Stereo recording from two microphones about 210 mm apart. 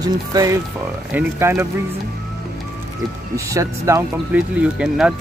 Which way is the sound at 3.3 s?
15° right (ahead or behind).